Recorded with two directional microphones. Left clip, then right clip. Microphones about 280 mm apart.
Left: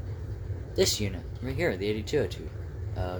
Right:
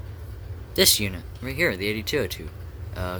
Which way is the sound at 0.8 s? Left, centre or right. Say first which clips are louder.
Right 6 dB; right.